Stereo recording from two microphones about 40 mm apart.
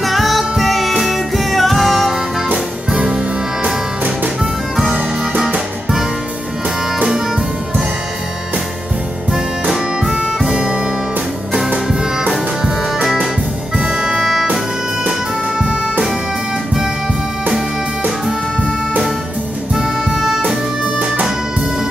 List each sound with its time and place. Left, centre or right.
0.0 s music: centre
3.0 s music: centre
4.4 s music: centre
9.3 s music: centre
10.5 s music: right
11.5 s music: centre
19.7 s music: centre